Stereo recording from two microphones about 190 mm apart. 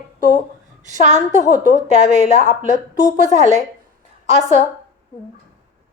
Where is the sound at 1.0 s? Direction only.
40° right (ahead or behind).